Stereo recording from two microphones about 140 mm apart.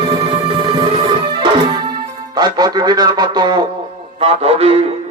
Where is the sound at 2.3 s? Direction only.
30° right (ahead or behind).